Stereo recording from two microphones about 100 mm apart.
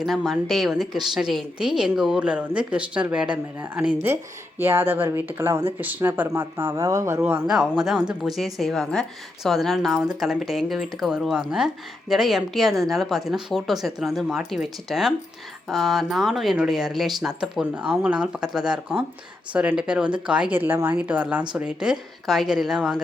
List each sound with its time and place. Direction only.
0.0 s a woman's voice: centre (ahead or behind)
4.0 s speech: 25° right (ahead or behind)
7.2 s speech: 20° right (ahead or behind)
7.4 s a woman's voice: 5° right (ahead or behind)